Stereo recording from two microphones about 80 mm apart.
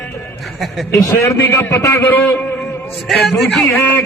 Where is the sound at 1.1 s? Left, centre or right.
Left.